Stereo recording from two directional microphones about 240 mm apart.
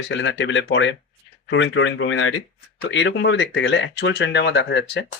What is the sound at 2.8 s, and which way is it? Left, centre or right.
Speech, left.